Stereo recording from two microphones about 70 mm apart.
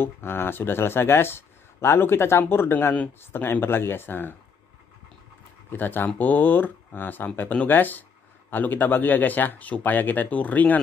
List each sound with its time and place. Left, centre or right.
0.0 s speech: left
5.7 s speech: left